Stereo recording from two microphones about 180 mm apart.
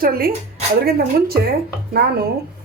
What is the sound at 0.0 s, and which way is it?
Speech, 55° right (ahead or behind).